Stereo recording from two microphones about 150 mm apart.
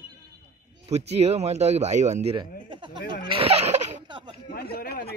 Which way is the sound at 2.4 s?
35° right (ahead or behind).